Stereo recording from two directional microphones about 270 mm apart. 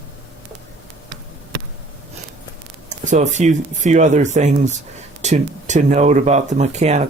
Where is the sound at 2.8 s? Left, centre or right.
Right.